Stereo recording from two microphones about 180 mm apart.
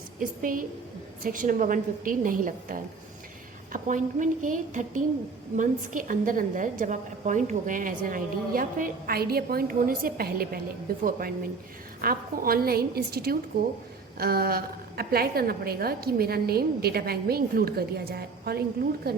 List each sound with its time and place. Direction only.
0.2 s a woman's voice: 50° right (ahead or behind)